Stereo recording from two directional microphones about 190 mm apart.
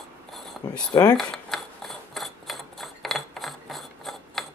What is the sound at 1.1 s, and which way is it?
Filing, centre (ahead or behind).